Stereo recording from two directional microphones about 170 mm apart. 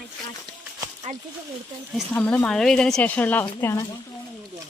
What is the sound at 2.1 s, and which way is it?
Speech, 10° left (ahead or behind).